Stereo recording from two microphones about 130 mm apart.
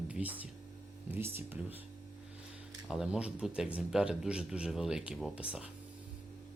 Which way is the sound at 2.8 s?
5° right (ahead or behind).